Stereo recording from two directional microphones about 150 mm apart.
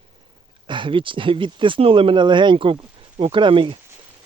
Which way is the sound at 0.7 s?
35° right (ahead or behind).